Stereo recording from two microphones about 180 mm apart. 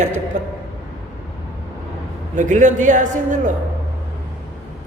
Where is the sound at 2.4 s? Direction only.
45° right (ahead or behind).